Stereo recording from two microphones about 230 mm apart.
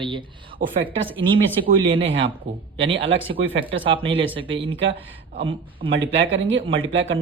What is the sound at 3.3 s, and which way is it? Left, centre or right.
Speech, right.